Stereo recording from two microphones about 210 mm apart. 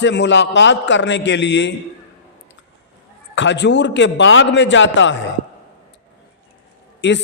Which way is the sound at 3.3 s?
60° left (ahead or behind).